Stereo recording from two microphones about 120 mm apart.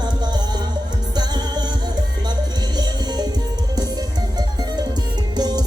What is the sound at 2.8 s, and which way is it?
Music, 35° right (ahead or behind).